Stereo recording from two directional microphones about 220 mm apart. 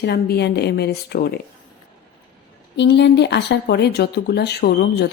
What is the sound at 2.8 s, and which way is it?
Speech, 50° left (ahead or behind).